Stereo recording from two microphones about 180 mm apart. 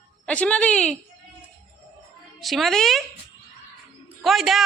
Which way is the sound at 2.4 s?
Centre (ahead or behind).